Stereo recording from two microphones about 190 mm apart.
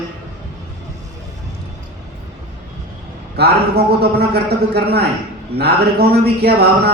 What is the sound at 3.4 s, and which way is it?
A man's voice, 60° right (ahead or behind).